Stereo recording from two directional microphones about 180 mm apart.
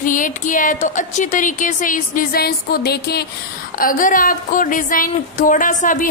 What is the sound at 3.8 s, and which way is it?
Speech, 50° left (ahead or behind).